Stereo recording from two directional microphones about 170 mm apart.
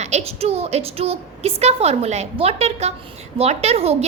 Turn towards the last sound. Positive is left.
turn(degrees=-35)  # may be behind; listen again after turning